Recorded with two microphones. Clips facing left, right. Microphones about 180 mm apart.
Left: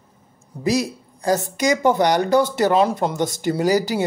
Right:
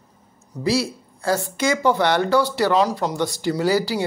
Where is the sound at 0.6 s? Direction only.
20° left (ahead or behind).